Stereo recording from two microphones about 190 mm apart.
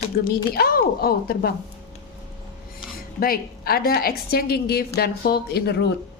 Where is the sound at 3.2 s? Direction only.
50° left (ahead or behind).